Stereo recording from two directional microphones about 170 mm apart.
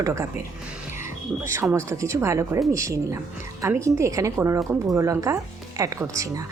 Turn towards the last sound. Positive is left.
turn(degrees=-20)  # may be behind; listen again after turning